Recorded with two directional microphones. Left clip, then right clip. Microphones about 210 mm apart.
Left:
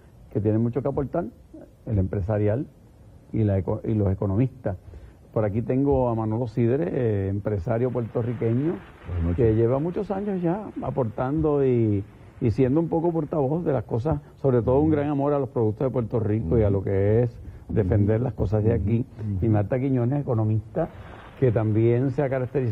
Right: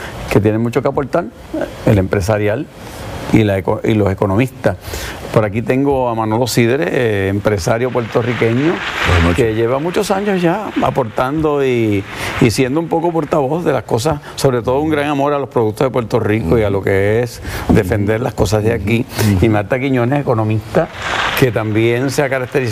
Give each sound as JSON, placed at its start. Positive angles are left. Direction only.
{"t": 0.4, "sound": "speech", "side_deg": -10}
{"t": 5.4, "sound": "speech", "side_deg": -10}
{"t": 12.9, "sound": "speech", "side_deg": -30}
{"t": 13.2, "sound": "speech", "side_deg": -15}